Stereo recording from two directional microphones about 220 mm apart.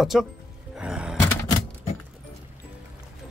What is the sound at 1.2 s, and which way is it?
Typewriter, 10° left (ahead or behind).